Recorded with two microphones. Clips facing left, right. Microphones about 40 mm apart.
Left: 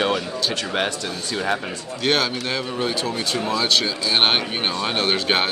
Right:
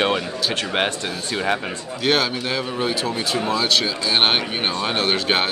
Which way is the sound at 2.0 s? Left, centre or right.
Centre.